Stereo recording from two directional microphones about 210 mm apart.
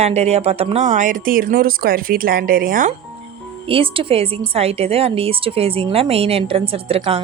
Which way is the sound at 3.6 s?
25° right (ahead or behind).